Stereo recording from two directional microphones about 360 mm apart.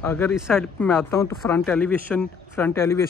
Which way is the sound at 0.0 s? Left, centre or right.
Centre.